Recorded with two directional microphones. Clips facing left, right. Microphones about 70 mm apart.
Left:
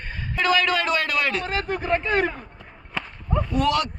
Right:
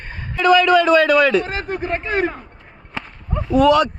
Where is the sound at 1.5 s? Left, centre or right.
Centre.